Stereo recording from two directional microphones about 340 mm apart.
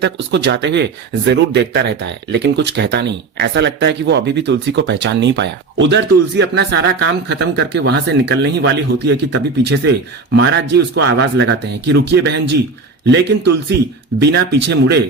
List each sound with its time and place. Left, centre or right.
0.0 s speech: right
14.2 s speech: right